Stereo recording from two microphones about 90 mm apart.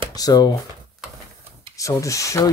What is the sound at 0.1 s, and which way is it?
Speech, 45° left (ahead or behind).